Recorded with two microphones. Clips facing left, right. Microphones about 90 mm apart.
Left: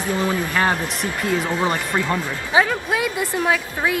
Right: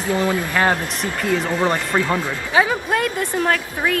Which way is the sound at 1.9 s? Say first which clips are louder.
Right 2 dB; 15° right (ahead or behind).